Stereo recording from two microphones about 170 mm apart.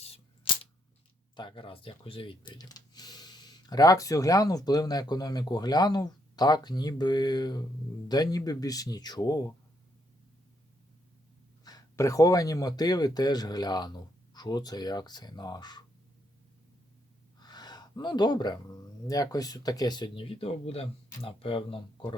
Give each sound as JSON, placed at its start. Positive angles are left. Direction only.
{"t": 0.0, "sound": "a sound", "side_deg": 35}
{"t": 1.4, "sound": "speech", "side_deg": 30}
{"t": 11.6, "sound": "speech", "side_deg": 20}
{"t": 17.4, "sound": "speech", "side_deg": 25}